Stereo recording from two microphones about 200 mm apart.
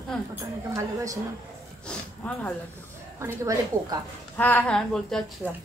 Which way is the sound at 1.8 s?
5° left (ahead or behind).